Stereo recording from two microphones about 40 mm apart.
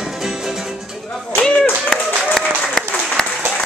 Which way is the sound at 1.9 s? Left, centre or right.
Centre.